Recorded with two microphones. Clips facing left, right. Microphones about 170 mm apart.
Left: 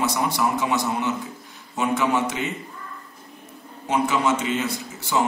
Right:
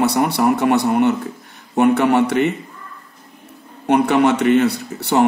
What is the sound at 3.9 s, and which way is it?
A man's voice, 65° right (ahead or behind).